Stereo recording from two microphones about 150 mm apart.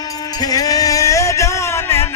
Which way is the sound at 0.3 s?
25° left (ahead or behind).